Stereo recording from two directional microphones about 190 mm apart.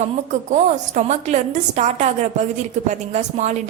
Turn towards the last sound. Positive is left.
turn(degrees=-40)  # may be behind; listen again after turning